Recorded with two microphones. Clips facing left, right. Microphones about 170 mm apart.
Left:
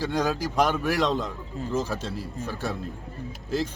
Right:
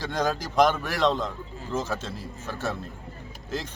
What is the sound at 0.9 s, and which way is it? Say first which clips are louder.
Speech: even; 40° left (ahead or behind).